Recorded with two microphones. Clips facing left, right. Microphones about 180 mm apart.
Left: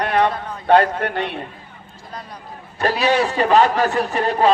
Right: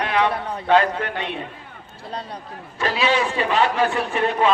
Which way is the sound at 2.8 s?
40° left (ahead or behind).